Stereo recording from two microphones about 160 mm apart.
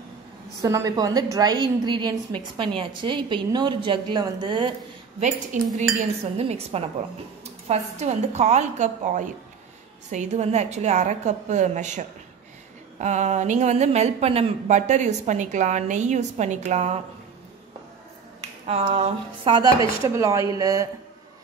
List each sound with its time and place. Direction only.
0.6 s a woman's voice: 20° right (ahead or behind)
5.2 s speech: 50° right (ahead or behind)
18.7 s a sound: 40° right (ahead or behind)
19.4 s a woman's voice: 25° right (ahead or behind)